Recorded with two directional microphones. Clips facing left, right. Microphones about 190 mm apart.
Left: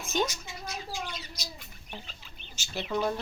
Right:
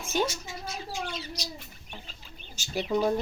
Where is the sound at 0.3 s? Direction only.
30° right (ahead or behind).